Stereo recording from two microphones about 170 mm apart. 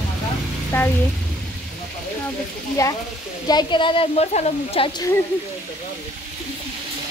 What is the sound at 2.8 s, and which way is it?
A woman's voice, 20° left (ahead or behind).